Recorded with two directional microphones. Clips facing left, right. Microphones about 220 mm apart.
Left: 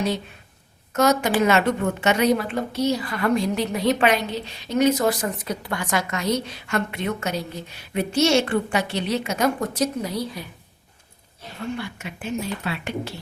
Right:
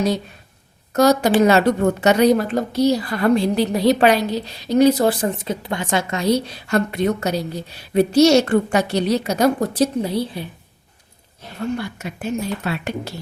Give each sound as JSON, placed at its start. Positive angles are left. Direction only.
{"t": 0.9, "sound": "a woman's voice", "side_deg": -35}
{"t": 11.6, "sound": "a woman's voice", "side_deg": -40}